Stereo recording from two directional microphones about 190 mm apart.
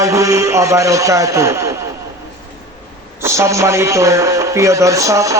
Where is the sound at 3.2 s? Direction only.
15° right (ahead or behind).